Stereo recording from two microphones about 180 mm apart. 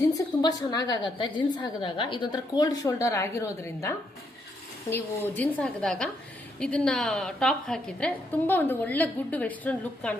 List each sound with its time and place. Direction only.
0.1 s a woman's voice: 20° left (ahead or behind)